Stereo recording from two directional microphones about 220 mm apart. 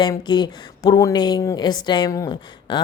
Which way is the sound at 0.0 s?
20° left (ahead or behind).